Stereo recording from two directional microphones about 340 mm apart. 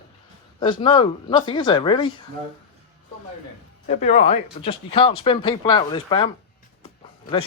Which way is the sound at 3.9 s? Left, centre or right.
Centre.